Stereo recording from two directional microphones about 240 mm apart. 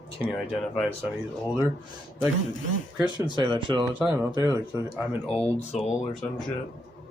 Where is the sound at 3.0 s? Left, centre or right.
Centre.